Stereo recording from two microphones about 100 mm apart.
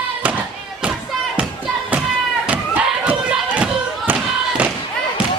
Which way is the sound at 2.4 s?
15° right (ahead or behind).